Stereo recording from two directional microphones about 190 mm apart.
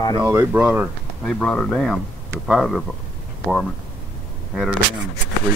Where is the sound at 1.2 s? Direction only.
5° left (ahead or behind).